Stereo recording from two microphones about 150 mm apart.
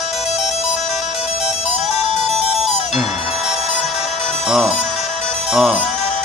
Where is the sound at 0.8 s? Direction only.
50° left (ahead or behind).